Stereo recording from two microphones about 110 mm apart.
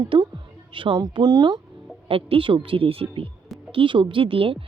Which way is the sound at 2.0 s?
60° right (ahead or behind).